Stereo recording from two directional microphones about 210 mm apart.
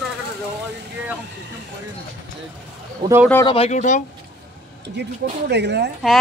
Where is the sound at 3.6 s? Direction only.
35° left (ahead or behind).